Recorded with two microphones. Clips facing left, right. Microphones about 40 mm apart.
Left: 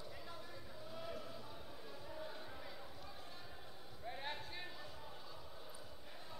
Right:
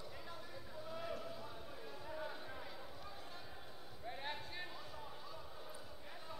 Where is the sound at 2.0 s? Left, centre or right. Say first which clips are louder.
Right 4 dB; right.